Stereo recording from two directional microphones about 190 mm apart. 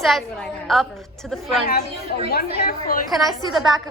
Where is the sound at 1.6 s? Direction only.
55° left (ahead or behind).